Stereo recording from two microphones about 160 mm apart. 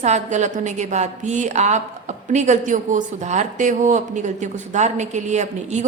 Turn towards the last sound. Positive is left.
turn(degrees=-45)  # may be behind; listen again after turning